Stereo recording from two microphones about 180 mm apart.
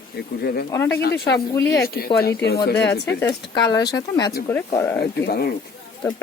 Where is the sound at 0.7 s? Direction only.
15° left (ahead or behind).